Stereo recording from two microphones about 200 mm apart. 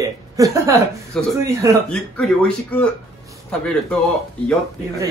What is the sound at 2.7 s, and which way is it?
A man's voice, 10° left (ahead or behind).